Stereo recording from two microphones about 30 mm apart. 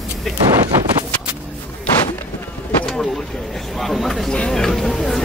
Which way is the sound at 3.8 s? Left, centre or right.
Centre.